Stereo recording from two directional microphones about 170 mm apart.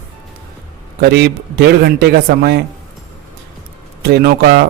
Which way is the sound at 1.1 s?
70° right (ahead or behind).